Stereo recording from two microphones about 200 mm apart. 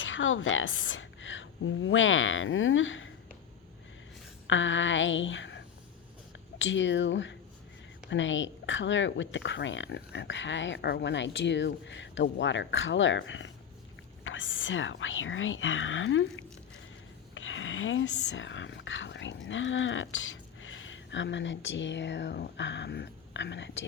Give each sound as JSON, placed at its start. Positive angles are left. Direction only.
{"t": 0.0, "sound": "a woman's voice", "side_deg": 75}
{"t": 4.4, "sound": "a sound", "side_deg": 70}
{"t": 6.6, "sound": "speech", "side_deg": 65}